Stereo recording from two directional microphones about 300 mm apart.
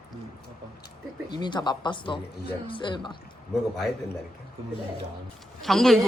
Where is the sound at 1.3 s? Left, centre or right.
Centre.